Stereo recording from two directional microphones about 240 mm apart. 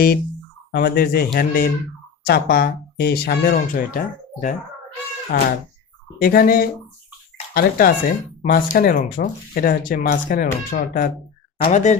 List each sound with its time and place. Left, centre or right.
0.7 s speech: left